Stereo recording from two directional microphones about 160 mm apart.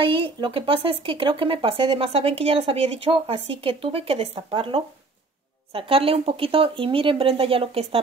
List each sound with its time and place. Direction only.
0.0 s speech: 30° right (ahead or behind)